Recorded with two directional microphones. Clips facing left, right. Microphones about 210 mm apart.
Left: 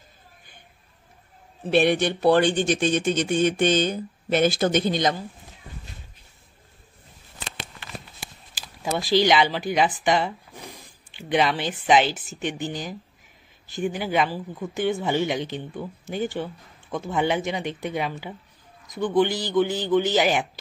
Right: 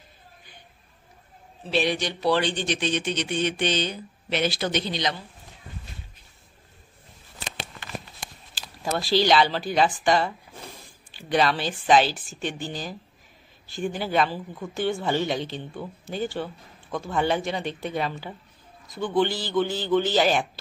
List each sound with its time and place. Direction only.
1.6 s speech: 55° left (ahead or behind)
8.8 s a man's voice: 15° left (ahead or behind)